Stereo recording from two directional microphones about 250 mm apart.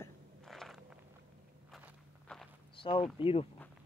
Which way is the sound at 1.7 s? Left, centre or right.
Centre.